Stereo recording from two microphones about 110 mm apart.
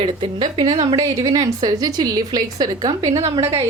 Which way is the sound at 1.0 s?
35° right (ahead or behind).